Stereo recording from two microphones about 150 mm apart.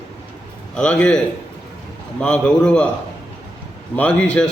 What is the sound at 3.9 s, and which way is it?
Speech, 10° left (ahead or behind).